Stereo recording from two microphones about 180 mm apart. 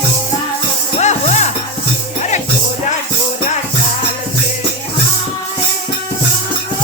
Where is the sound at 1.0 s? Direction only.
40° left (ahead or behind).